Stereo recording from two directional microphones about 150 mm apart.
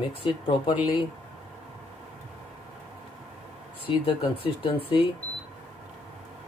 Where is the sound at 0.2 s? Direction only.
35° left (ahead or behind).